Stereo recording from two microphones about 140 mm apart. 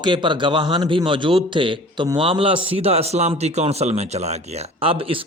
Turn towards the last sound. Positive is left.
turn(degrees=-40)  # may be behind; listen again after turning